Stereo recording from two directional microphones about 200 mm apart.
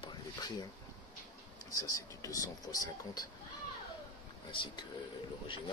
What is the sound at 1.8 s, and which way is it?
Speech, 15° left (ahead or behind).